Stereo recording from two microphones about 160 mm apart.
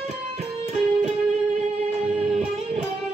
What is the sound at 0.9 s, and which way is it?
Music, 45° right (ahead or behind).